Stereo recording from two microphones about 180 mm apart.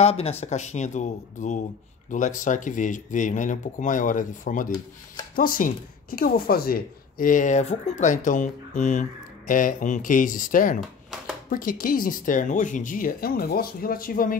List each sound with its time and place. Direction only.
0.0 s speech: 35° left (ahead or behind); by 14.3 s 55° left (ahead or behind)